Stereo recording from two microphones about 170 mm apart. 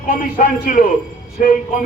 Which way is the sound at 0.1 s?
55° left (ahead or behind).